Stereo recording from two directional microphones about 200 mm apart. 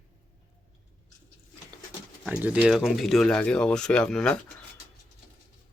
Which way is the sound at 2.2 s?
5° right (ahead or behind).